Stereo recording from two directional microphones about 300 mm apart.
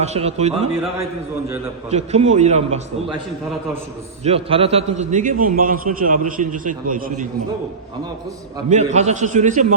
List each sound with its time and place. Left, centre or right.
0.0 s a man's voice: right
1.9 s a man's voice: right
4.2 s a man's voice: centre
8.7 s a man's voice: right